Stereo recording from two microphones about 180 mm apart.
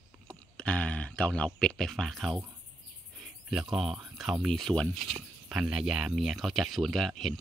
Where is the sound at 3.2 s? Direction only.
Centre (ahead or behind).